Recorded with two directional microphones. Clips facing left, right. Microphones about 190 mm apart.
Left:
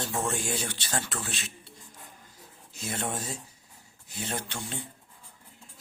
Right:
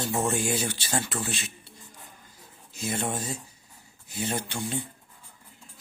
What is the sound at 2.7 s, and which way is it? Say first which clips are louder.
Speech: right 3 dB; centre (ahead or behind).